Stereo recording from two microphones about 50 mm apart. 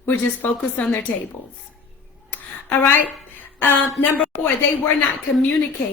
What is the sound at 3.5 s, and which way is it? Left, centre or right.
Speech, left.